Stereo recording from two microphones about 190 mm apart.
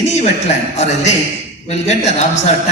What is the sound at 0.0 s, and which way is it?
A man's voice, 35° left (ahead or behind).